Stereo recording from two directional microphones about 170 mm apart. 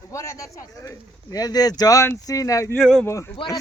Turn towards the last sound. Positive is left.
turn(degrees=15)  # may be behind; listen again after turning